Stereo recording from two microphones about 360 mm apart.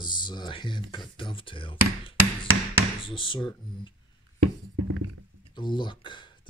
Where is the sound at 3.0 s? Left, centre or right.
Centre.